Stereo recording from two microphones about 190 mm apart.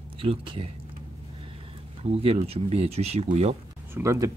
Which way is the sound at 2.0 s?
30° right (ahead or behind).